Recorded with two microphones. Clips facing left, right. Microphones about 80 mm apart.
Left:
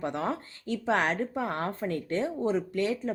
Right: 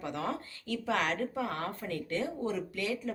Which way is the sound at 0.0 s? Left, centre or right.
Left.